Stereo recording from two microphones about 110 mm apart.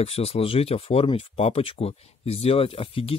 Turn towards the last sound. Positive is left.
turn(degrees=60)  # may be behind; listen again after turning